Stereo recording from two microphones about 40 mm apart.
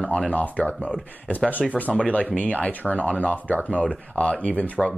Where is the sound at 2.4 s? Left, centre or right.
Left.